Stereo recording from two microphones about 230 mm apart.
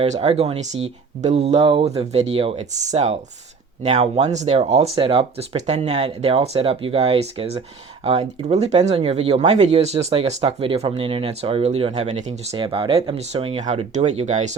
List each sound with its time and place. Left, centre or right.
0.0 s speech: right